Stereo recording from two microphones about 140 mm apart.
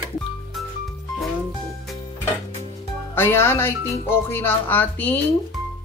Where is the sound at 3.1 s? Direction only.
15° left (ahead or behind).